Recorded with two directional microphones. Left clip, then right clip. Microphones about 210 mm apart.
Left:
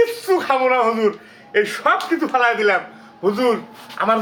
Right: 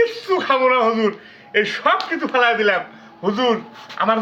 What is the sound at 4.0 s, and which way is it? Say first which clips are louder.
Speech: even; 5° left (ahead or behind).